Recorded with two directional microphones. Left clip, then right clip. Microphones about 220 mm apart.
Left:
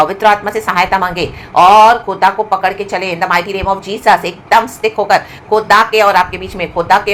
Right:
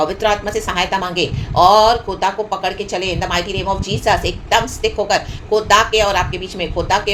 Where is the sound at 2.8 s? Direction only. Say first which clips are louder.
Left 5 dB; 15° left (ahead or behind).